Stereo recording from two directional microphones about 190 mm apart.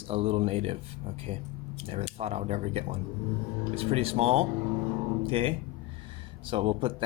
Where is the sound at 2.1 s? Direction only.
35° right (ahead or behind).